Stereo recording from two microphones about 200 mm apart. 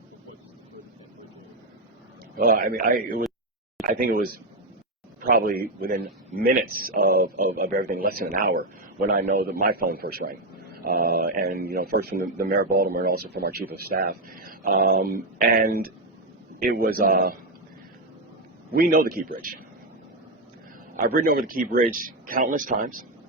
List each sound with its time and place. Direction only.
2.4 s a man's voice: 45° right (ahead or behind)
18.7 s a man's voice: 50° right (ahead or behind)
20.9 s a man's voice: 45° right (ahead or behind)